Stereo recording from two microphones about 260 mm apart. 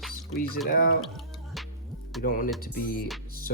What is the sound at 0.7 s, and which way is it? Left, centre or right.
Speech, left.